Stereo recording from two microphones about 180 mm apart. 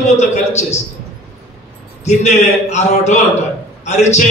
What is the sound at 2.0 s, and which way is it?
A man's voice, 40° left (ahead or behind).